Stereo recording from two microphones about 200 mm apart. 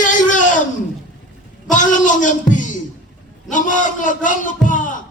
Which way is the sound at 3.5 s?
40° left (ahead or behind).